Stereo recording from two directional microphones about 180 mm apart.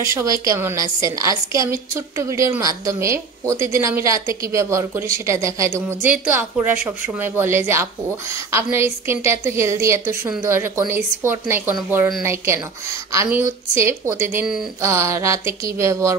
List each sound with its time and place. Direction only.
0.0 s a woman's voice: 15° right (ahead or behind)